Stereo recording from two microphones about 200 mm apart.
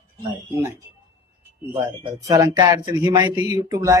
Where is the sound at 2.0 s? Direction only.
15° right (ahead or behind).